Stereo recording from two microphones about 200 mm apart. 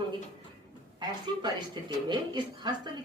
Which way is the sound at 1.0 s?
20° right (ahead or behind).